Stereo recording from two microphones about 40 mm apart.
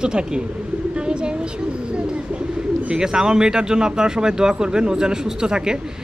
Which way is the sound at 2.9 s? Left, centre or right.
Centre.